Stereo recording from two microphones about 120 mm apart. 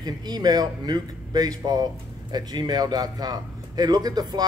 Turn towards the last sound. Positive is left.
turn(degrees=-35)  # may be behind; listen again after turning